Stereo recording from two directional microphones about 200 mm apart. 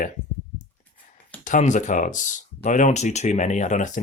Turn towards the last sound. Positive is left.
turn(degrees=35)  # may be behind; listen again after turning